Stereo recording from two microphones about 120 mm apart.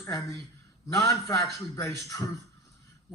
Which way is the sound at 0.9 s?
25° left (ahead or behind).